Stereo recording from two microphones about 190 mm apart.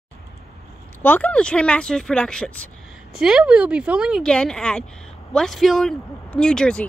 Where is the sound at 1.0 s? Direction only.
10° left (ahead or behind).